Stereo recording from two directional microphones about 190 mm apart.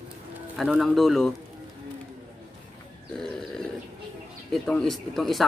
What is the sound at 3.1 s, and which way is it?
Grunt, centre (ahead or behind).